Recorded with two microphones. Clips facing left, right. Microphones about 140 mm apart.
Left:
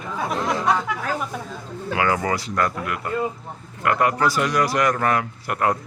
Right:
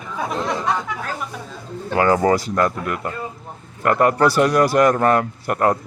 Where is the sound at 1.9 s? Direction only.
35° right (ahead or behind).